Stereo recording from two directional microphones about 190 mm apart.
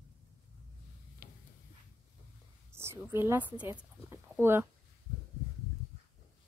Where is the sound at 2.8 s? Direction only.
10° right (ahead or behind).